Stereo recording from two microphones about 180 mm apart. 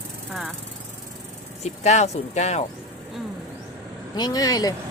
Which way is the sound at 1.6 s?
40° left (ahead or behind).